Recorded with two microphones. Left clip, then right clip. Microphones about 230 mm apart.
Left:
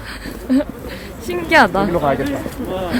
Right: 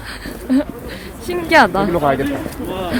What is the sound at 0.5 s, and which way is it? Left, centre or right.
Speech, centre.